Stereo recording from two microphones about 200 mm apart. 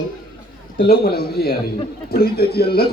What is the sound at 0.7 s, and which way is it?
Speech, 50° left (ahead or behind).